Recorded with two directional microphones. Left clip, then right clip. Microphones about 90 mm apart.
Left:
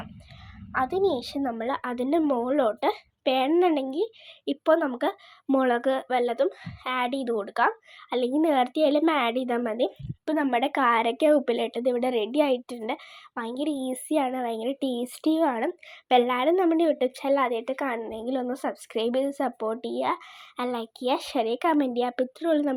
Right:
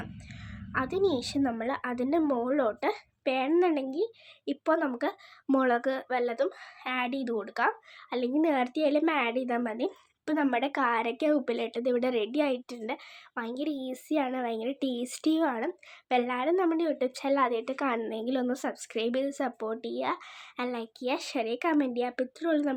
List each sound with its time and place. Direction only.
0.7 s a woman's voice: 15° left (ahead or behind)
1.6 s speech: 30° left (ahead or behind)
5.5 s a woman's voice: 10° left (ahead or behind)
5.7 s speech: 30° left (ahead or behind)
9.6 s speech: 30° left (ahead or behind)
11.9 s a woman's voice: 5° left (ahead or behind)
15.5 s a woman's voice: 50° left (ahead or behind)
16.5 s speech: 35° left (ahead or behind)
17.2 s a woman's voice: 15° left (ahead or behind)
18.0 s a woman's voice: 10° right (ahead or behind)
18.5 s a woman's voice: 15° left (ahead or behind)